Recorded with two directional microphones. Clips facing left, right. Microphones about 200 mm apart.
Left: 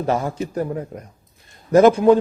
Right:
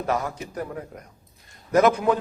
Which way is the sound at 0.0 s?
30° left (ahead or behind).